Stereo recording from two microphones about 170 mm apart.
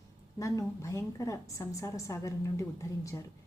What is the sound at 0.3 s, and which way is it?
A woman's voice, 20° left (ahead or behind).